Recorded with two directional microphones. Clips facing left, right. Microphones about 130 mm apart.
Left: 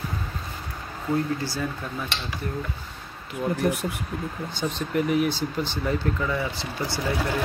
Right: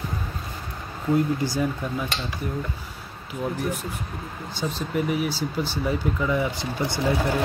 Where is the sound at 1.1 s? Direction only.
15° right (ahead or behind).